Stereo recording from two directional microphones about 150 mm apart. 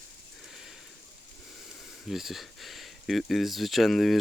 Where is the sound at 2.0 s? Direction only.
Centre (ahead or behind).